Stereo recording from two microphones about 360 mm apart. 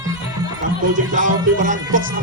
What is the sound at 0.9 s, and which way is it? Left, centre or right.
Music, right.